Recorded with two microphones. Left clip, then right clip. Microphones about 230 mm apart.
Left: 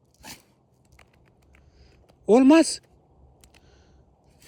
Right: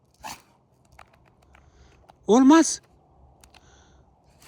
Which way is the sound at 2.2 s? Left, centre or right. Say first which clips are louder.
Even; centre.